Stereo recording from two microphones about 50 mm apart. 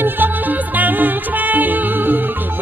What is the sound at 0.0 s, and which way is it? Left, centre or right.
Music, right.